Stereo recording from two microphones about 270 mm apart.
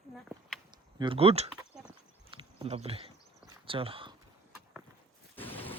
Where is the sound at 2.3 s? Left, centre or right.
Right.